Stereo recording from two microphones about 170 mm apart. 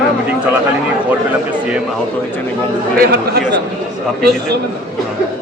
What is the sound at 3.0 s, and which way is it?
Speech, 70° right (ahead or behind).